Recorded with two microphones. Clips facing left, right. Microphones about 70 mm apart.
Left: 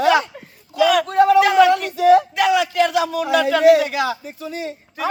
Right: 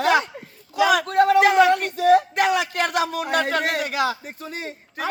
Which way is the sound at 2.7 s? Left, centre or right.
Right.